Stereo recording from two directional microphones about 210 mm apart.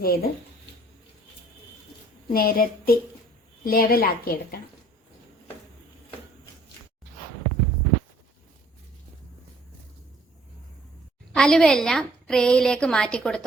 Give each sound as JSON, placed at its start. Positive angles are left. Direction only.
{"t": 0.0, "sound": "a woman's voice", "side_deg": 45}
{"t": 2.3, "sound": "a woman's voice", "side_deg": 45}
{"t": 11.3, "sound": "a woman's voice", "side_deg": 5}